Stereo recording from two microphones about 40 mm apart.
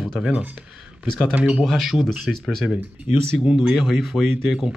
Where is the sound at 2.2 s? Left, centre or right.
Centre.